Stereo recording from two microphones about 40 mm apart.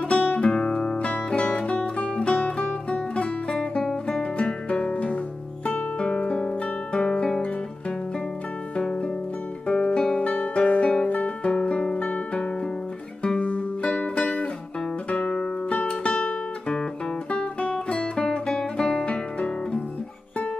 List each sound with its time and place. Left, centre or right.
0.0 s music: left
0.9 s music: left; by 4.3 s centre
4.4 s music: left
5.9 s guitar: left
8.7 s music: left
10.1 s guitar: left
13.4 s music: left
15.3 s music: left
16.1 s guitar: left
17.3 s music: left
19.0 s guitar: left